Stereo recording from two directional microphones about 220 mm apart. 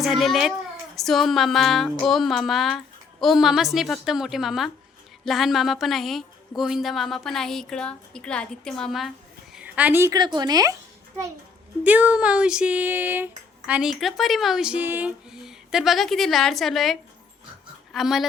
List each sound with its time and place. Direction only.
0.0 s a woman's voice: centre (ahead or behind); by 10.8 s 15° right (ahead or behind)
11.8 s speech: 5° right (ahead or behind)